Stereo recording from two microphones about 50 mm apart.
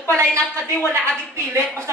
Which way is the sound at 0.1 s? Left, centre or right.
Right.